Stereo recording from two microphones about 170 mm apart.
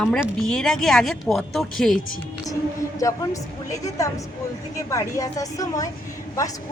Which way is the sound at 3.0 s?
20° left (ahead or behind).